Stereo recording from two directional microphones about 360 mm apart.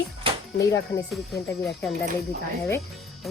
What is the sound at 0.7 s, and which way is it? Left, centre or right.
Speech, centre.